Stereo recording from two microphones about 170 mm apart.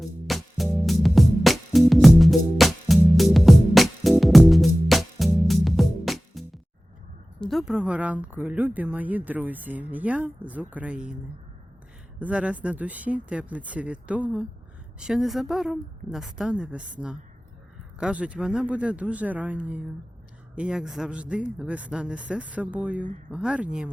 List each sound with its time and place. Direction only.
0.0 s music: centre (ahead or behind)
7.4 s speech: centre (ahead or behind)
12.2 s a woman's voice: 5° right (ahead or behind)